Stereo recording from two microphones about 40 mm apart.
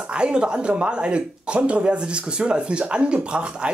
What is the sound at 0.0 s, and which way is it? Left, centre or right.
Speech, right.